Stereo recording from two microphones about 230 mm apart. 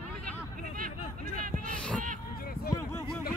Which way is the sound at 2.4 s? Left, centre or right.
Left.